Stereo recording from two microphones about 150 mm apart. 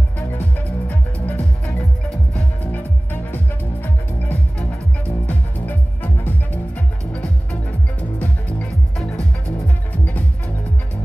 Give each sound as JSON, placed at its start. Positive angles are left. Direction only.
{"t": 0.4, "sound": "music", "side_deg": 10}
{"t": 8.2, "sound": "music", "side_deg": 5}